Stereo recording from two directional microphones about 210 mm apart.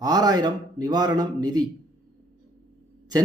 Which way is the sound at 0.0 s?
20° right (ahead or behind).